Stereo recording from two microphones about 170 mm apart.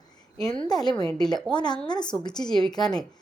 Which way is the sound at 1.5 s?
25° left (ahead or behind).